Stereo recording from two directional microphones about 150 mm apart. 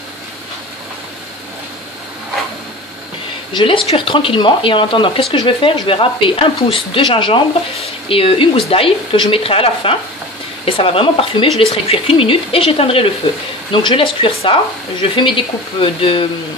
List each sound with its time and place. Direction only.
3.5 s a woman's voice: 35° left (ahead or behind)